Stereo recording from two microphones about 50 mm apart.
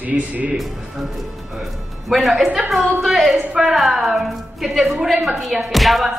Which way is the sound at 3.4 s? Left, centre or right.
Right.